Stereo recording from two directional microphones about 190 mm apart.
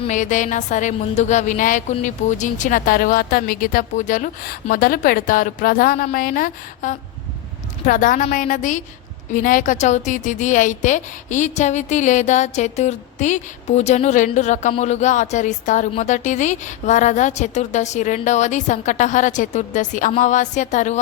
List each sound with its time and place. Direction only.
0.1 s a woman's voice: 40° left (ahead or behind)